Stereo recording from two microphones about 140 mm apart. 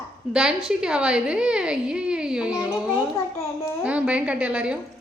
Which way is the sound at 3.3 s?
20° left (ahead or behind).